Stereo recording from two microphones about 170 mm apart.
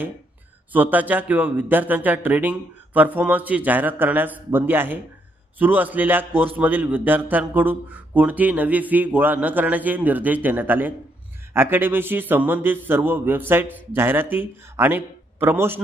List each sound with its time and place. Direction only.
0.7 s speech: 10° right (ahead or behind)